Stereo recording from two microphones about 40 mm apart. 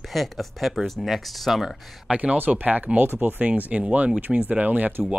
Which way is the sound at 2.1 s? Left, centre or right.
Right.